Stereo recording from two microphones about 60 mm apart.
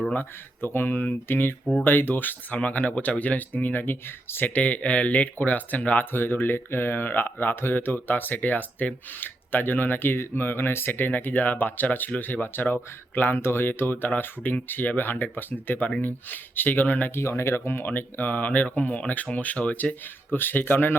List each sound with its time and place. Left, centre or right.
0.1 s speech: left
6.1 s speech: left
17.2 s speech: left